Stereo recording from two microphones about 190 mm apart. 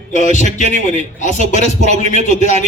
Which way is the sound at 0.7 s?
35° right (ahead or behind).